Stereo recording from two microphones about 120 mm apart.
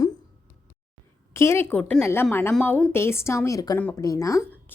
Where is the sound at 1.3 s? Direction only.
25° left (ahead or behind).